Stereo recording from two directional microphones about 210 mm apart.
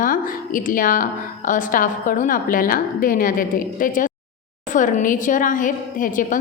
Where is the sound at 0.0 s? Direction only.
40° left (ahead or behind).